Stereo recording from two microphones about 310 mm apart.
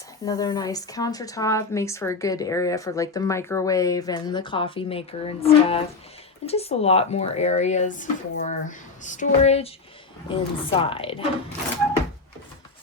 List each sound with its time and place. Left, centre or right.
0.3 s a woman's voice: centre